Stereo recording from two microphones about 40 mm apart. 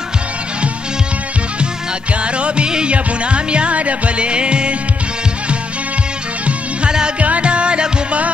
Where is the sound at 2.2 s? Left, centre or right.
Right.